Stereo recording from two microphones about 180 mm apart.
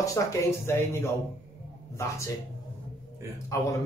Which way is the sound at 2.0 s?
15° left (ahead or behind).